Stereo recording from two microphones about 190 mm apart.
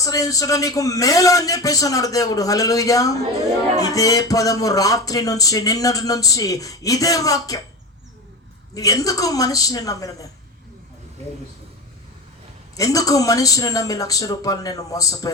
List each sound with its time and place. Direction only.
0.0 s a man's voice: 20° left (ahead or behind)
8.7 s speech: 20° left (ahead or behind)
12.7 s a man's voice: 20° left (ahead or behind)